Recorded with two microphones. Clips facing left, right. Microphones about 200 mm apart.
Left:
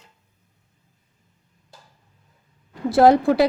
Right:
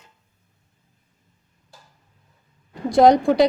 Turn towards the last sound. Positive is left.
turn(degrees=5)  # may be behind; listen again after turning